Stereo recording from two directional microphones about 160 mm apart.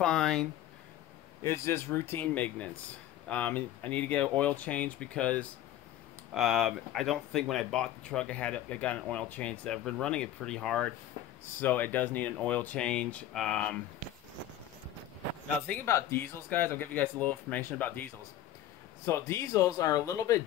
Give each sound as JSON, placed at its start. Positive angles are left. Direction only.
{"t": 0.0, "sound": "speech", "side_deg": 5}
{"t": 1.4, "sound": "speech", "side_deg": 15}
{"t": 15.6, "sound": "speech", "side_deg": 15}